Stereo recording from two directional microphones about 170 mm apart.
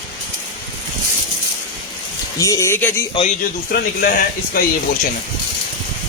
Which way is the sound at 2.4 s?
20° left (ahead or behind).